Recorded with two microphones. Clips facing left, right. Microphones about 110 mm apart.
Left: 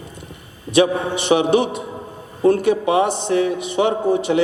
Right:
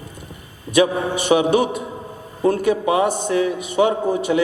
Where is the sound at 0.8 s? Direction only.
40° right (ahead or behind).